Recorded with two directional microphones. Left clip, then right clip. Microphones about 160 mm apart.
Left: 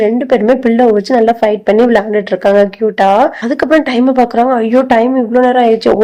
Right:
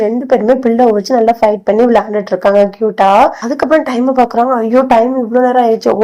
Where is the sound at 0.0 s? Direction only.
15° left (ahead or behind).